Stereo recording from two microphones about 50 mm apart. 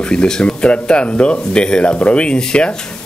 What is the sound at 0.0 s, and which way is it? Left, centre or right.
Speech, centre.